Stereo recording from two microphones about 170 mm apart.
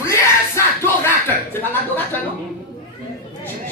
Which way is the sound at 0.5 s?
15° left (ahead or behind).